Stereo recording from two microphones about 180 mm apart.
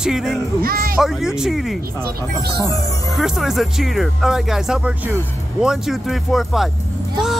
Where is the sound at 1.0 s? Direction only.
5° right (ahead or behind).